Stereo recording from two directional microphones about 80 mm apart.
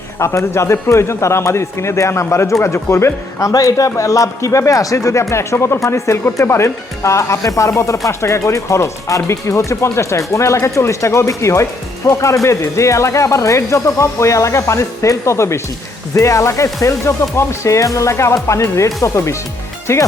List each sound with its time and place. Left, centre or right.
0.2 s speech: left
3.5 s speech: left